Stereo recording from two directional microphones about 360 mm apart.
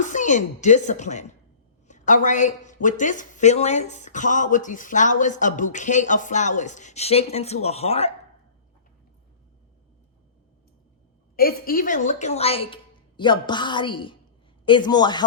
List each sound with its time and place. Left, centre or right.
0.0 s a woman's voice: left
11.3 s a woman's voice: left